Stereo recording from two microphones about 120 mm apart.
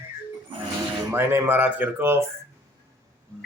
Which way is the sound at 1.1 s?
20° right (ahead or behind).